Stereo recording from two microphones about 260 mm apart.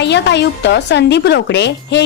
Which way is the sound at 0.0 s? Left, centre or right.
Left.